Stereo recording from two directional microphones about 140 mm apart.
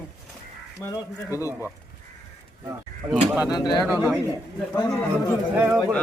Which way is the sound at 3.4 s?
30° left (ahead or behind).